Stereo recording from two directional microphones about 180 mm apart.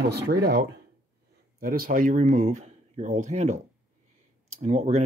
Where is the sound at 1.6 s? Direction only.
50° right (ahead or behind).